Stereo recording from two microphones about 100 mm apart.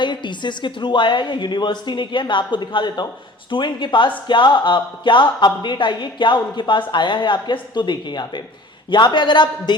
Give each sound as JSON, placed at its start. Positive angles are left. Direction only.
{"t": 0.0, "sound": "a woman's voice", "side_deg": 50}